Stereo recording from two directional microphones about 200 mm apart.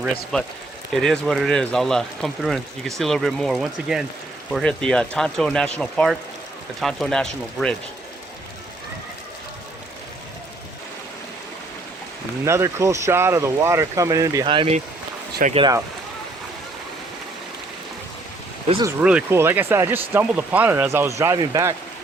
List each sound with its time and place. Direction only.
0.3 s speech: centre (ahead or behind)
12.5 s speech: 15° right (ahead or behind)
18.9 s speech: 10° right (ahead or behind)